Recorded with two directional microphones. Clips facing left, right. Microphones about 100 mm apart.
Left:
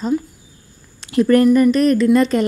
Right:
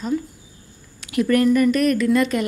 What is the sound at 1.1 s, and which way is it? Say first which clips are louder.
A woman's voice: left 5 dB; 30° left (ahead or behind).